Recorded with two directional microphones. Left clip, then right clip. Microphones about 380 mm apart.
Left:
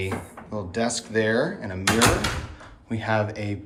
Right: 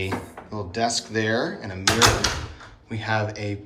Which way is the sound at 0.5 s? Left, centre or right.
Centre.